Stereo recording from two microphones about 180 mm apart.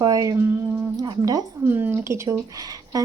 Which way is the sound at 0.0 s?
20° right (ahead or behind).